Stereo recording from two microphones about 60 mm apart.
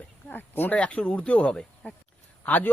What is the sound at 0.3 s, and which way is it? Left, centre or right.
Speech, left.